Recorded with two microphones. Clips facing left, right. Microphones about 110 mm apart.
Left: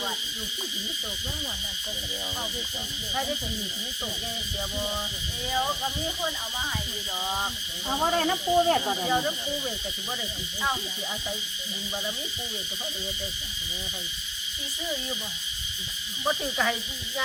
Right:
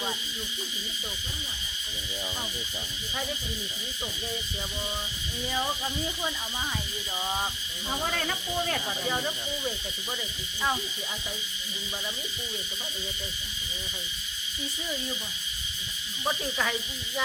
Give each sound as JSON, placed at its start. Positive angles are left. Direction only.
{"t": 7.2, "sound": "speech", "side_deg": 0}
{"t": 7.9, "sound": "speech", "side_deg": 30}
{"t": 9.0, "sound": "speech", "side_deg": 5}
{"t": 16.2, "sound": "speech", "side_deg": 5}